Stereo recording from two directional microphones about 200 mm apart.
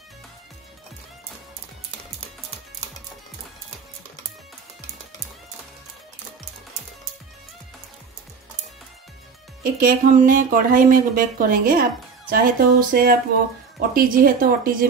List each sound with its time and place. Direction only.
9.6 s speech: 45° right (ahead or behind)